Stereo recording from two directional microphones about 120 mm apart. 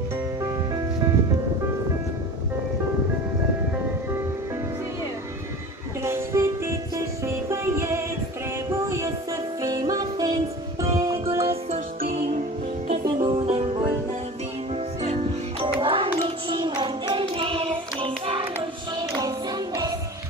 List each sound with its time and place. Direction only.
6.0 s music: 25° right (ahead or behind)
11.2 s music: 55° right (ahead or behind); by 13.0 s 70° right (ahead or behind)
13.0 s music: 40° right (ahead or behind)
14.7 s music: 60° right (ahead or behind); by 20.0 s 30° right (ahead or behind)